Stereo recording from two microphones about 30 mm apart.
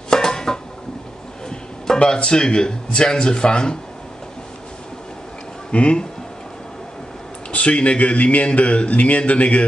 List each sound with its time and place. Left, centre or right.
0.1 s a sound: left
2.1 s speech: left
5.7 s speech: left
7.5 s speech: left